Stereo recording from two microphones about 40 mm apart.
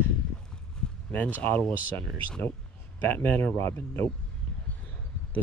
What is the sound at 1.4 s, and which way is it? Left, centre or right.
Speech, left.